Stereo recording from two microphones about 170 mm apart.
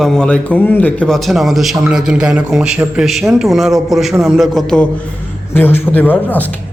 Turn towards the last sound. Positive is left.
turn(degrees=10)  # may be behind; listen again after turning